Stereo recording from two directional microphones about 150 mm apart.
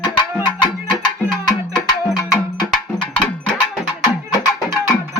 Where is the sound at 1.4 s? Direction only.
25° left (ahead or behind).